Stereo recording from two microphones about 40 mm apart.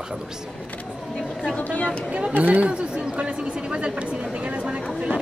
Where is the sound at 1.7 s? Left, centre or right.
Left.